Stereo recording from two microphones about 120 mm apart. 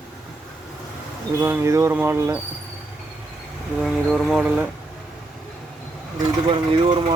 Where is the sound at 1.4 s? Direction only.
20° right (ahead or behind).